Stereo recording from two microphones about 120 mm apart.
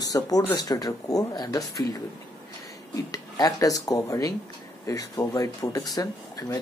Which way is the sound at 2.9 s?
30° left (ahead or behind).